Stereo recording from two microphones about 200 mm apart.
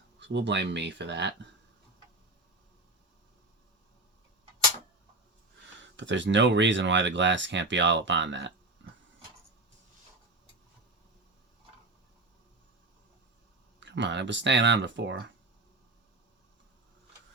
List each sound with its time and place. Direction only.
0.2 s speech: 60° right (ahead or behind)
6.0 s speech: 65° right (ahead or behind)
8.8 s a sound: 65° right (ahead or behind)
13.7 s speech: 65° right (ahead or behind)